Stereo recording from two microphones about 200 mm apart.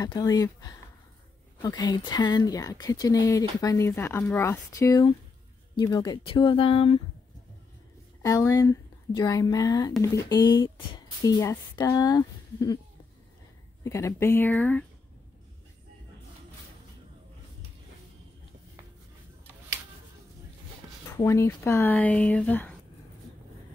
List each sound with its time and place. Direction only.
0.0 s speech: 20° left (ahead or behind)
8.2 s speech: 15° left (ahead or behind)
13.8 s speech: 15° left (ahead or behind)
21.2 s speech: 15° left (ahead or behind)